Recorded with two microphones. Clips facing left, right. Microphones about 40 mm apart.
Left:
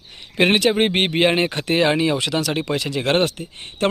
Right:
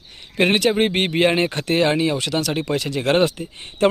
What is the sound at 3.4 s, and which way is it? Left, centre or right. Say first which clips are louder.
Speech: right 2 dB; centre.